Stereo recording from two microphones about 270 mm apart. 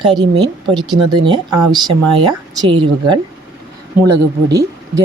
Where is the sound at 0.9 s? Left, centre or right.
Centre.